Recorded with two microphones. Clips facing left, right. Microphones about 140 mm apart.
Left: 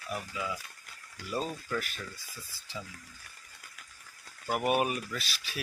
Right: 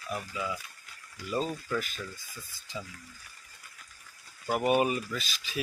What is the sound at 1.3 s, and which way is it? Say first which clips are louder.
Speech: right 2 dB; 5° left (ahead or behind).